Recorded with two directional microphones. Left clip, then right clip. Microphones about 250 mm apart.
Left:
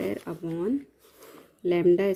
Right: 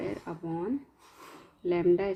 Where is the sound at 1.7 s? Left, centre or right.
Left.